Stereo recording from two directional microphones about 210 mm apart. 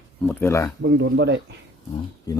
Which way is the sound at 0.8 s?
55° right (ahead or behind).